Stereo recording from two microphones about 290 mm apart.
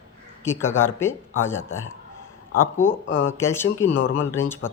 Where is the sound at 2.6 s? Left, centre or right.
Centre.